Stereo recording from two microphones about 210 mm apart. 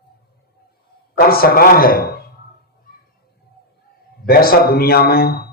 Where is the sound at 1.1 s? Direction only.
45° left (ahead or behind).